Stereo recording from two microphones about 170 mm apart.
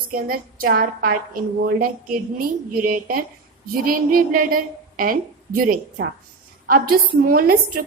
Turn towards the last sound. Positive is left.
turn(degrees=-60)  # may be behind; listen again after turning